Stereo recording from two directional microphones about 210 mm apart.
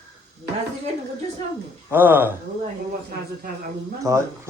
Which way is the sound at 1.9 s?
10° right (ahead or behind).